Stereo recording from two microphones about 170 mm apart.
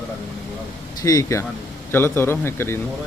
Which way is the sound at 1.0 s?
20° left (ahead or behind).